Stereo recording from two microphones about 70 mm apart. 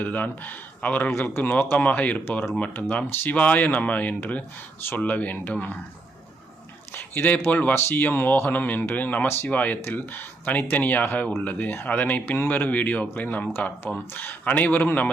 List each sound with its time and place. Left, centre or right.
0.0 s speech: left
6.9 s speech: left